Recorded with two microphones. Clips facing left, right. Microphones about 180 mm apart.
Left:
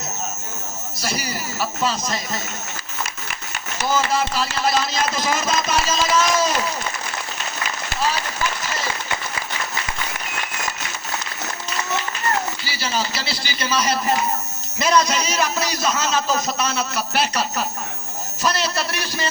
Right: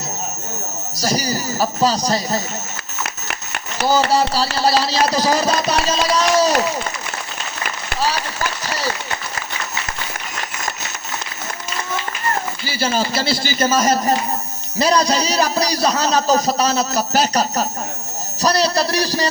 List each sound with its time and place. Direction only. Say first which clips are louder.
0.9 s a man's voice: right 7 dB; 40° right (ahead or behind)
4.1 s a man's voice: right 5 dB; 35° right (ahead or behind)
12.6 s a man's voice: right 5 dB; 45° right (ahead or behind)